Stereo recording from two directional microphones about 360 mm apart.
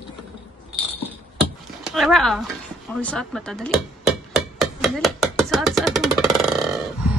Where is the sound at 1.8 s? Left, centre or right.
Centre.